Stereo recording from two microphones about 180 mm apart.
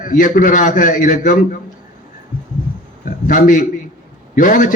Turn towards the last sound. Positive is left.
turn(degrees=45)  # may be behind; listen again after turning